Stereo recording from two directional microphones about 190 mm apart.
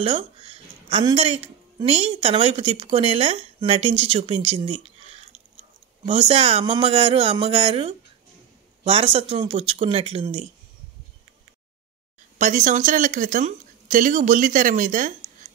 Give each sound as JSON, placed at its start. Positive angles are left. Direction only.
{"t": 0.0, "sound": "a woman's voice", "side_deg": -30}
{"t": 6.0, "sound": "a woman's voice", "side_deg": -30}
{"t": 12.4, "sound": "speech", "side_deg": -40}